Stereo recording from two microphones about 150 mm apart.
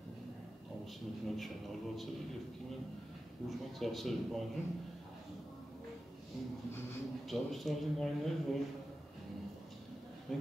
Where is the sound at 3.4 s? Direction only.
Centre (ahead or behind).